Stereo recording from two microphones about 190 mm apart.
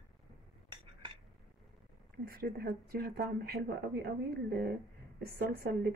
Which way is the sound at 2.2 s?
55° right (ahead or behind).